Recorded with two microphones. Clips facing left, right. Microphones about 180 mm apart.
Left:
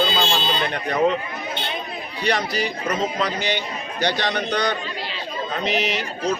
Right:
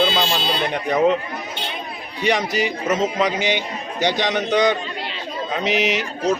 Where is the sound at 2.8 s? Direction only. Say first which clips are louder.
Right 5 dB; 20° right (ahead or behind).